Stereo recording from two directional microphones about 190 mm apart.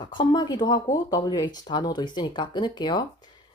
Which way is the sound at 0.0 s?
25° left (ahead or behind).